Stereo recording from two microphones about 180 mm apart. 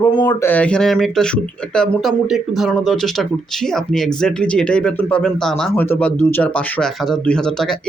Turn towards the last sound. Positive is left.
turn(degrees=0)  # may be behind; listen again after turning